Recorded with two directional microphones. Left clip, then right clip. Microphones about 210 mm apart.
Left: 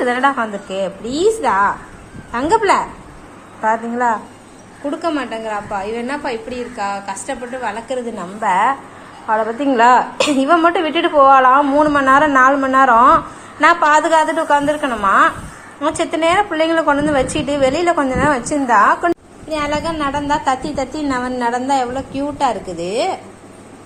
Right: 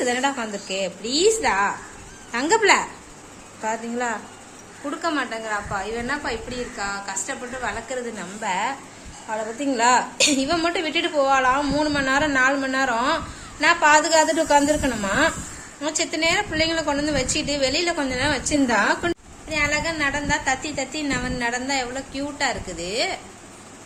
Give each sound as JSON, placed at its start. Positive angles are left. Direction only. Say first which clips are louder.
{"t": 0.0, "sound": "a woman's voice", "louder": "left 8 dB", "side_deg": -15}
{"t": 4.9, "sound": "a woman's voice", "louder": "left 5 dB", "side_deg": 5}
{"t": 8.4, "sound": "a woman's voice", "louder": "left 11 dB", "side_deg": -5}
{"t": 19.5, "sound": "a woman's voice", "louder": "left 3 dB", "side_deg": 5}